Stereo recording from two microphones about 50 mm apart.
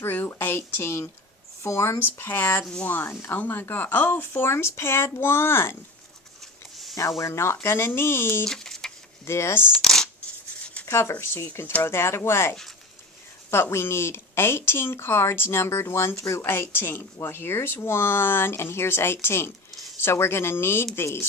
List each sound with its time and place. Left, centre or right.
0.4 s speech: left
2.0 s speech: left
3.0 s speech: left
3.3 s speech: left
6.4 s a sound: centre
7.2 s speech: left
8.4 s a sound: centre
9.2 s speech: left
9.8 s speech: centre
11.0 s speech: left
11.8 s speech: left
16.5 s speech: left